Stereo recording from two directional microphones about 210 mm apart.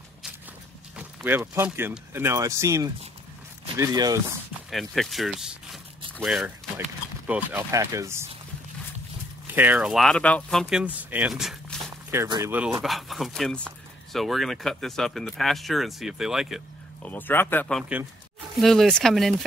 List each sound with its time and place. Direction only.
0.9 s speech: 10° right (ahead or behind)
4.6 s speech: centre (ahead or behind)
9.5 s speech: 10° right (ahead or behind)
12.1 s speech: 15° right (ahead or behind); by 19.3 s centre (ahead or behind)